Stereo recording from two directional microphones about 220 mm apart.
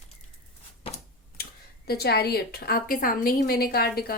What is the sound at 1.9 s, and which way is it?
A woman's voice, 45° left (ahead or behind).